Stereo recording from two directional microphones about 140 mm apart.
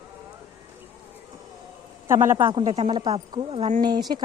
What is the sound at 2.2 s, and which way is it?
Speech, 20° right (ahead or behind).